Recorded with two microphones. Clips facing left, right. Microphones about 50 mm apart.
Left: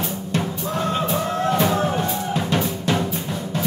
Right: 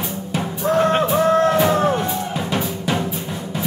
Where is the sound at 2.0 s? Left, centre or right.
Centre.